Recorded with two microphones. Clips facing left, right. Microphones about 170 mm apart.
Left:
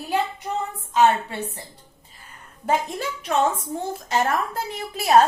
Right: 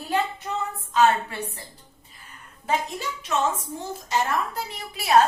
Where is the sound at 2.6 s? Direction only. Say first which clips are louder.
Left 3 dB; 55° left (ahead or behind).